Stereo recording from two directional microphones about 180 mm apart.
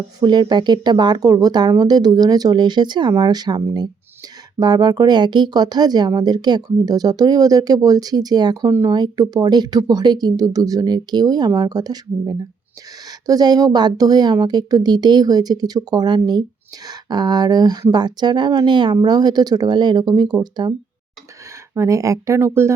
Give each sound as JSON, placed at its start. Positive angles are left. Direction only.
{"t": 0.2, "sound": "speech", "side_deg": -25}
{"t": 21.8, "sound": "speech", "side_deg": -15}